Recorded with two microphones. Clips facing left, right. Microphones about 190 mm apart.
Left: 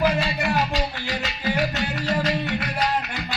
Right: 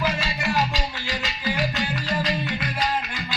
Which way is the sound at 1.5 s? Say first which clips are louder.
Left 1 dB; 65° left (ahead or behind).